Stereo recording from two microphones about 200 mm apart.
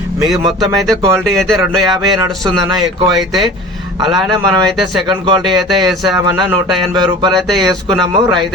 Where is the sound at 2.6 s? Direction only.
20° right (ahead or behind).